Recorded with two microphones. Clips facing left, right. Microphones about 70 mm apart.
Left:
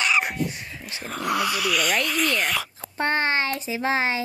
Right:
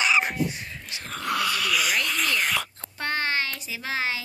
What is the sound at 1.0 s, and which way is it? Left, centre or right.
Speech, centre.